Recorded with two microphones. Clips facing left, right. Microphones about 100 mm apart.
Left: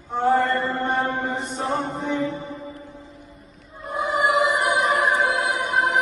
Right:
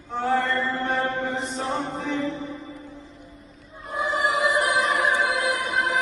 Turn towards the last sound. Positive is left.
turn(degrees=0)  # may be behind; listen again after turning